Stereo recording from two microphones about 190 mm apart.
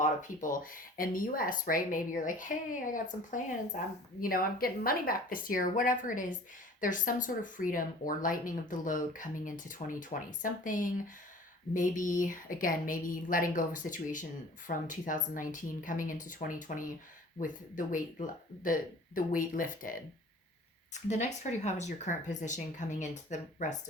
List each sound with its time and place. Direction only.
0.0 s speech: 40° left (ahead or behind)